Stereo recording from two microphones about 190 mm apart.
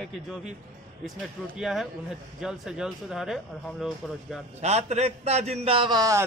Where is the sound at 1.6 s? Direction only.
Centre (ahead or behind).